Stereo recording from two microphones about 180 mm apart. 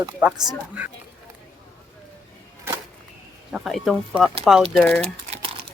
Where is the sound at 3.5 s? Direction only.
Centre (ahead or behind).